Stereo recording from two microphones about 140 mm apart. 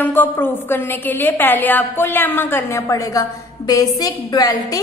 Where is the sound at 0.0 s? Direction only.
15° left (ahead or behind).